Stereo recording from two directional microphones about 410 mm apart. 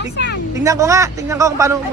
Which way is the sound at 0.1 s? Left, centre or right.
Left.